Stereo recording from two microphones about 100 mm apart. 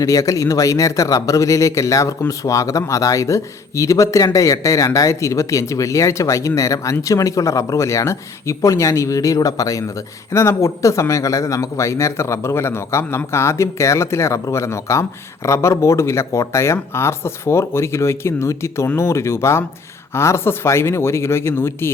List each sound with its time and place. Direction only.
0.0 s a man's voice: 35° left (ahead or behind)